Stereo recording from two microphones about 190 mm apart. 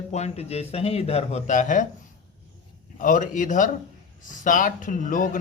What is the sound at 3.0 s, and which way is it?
A man's voice, 45° left (ahead or behind).